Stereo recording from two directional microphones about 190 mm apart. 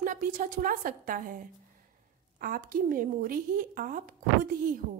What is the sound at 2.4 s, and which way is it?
A woman's voice, 50° right (ahead or behind).